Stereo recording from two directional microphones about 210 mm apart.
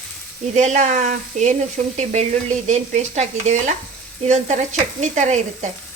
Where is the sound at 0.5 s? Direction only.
35° right (ahead or behind).